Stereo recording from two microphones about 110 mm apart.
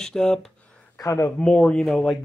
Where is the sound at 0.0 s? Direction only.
5° left (ahead or behind).